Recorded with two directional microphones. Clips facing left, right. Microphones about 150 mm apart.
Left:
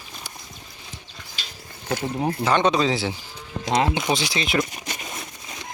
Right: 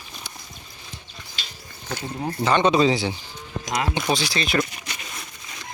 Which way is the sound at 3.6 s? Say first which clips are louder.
Left 4 dB; 30° left (ahead or behind).